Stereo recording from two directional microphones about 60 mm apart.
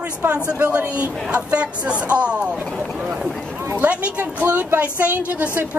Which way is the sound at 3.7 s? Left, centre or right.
Right.